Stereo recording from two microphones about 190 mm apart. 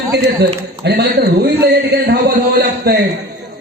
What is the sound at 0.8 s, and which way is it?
A man's voice, 55° right (ahead or behind).